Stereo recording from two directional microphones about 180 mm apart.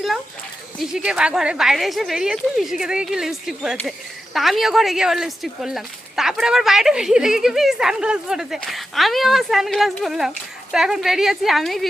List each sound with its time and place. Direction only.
0.8 s speech: 5° right (ahead or behind)